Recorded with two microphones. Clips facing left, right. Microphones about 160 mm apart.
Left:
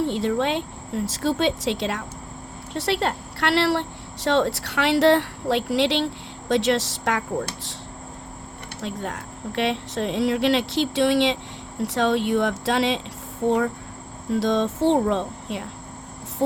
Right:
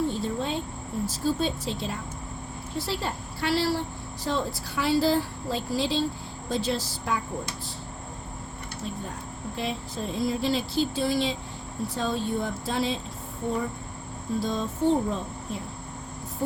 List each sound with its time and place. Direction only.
0.0 s speech: 80° left
8.8 s speech: 90° left
14.3 s cricket: 90° left